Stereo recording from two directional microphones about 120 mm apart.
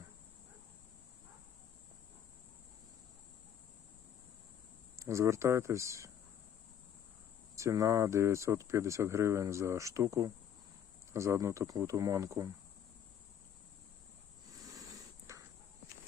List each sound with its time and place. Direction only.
4.9 s speech: 25° right (ahead or behind)
7.5 s speech: 25° right (ahead or behind)
14.6 s a sound: 30° right (ahead or behind)
15.3 s walk: 25° right (ahead or behind)